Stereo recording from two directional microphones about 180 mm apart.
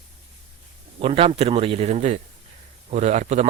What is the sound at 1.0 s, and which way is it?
A man's voice, 30° right (ahead or behind).